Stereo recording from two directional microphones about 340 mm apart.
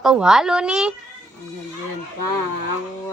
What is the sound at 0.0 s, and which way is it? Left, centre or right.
Speech, centre.